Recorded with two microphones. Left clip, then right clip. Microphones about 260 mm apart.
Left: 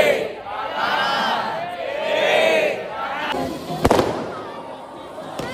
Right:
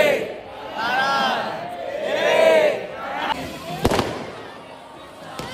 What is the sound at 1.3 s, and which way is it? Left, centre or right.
Crowd, centre.